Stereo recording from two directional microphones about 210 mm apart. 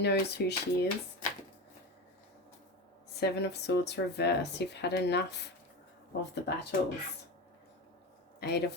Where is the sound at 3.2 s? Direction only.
50° left (ahead or behind).